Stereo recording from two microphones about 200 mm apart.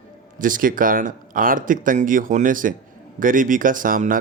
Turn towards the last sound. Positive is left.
turn(degrees=-40)  # may be behind; listen again after turning